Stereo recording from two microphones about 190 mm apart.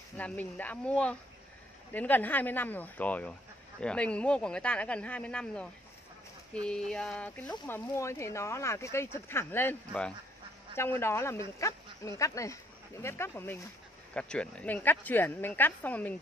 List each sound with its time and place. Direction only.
0.2 s speech: 10° left (ahead or behind)
6.5 s a sound: 5° left (ahead or behind)
7.6 s speech: 10° left (ahead or behind)